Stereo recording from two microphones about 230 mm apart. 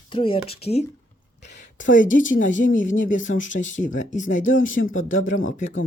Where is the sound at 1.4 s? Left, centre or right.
Left.